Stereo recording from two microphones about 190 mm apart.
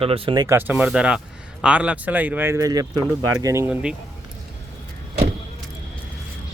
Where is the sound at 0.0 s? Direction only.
30° right (ahead or behind).